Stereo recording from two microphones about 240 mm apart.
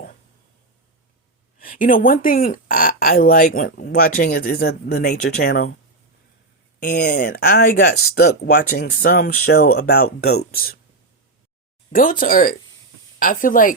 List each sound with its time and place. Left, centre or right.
1.5 s speech: left
6.7 s speech: left
11.9 s speech: left